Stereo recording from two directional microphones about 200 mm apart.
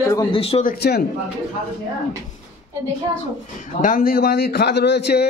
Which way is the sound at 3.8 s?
45° left (ahead or behind).